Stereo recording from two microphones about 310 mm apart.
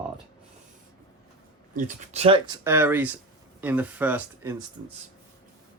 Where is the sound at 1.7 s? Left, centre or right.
Right.